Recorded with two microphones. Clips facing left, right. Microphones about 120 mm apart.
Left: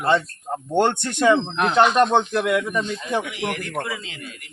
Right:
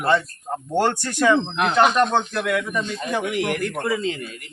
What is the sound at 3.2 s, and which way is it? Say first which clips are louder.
Speech: right 5 dB; 50° right (ahead or behind).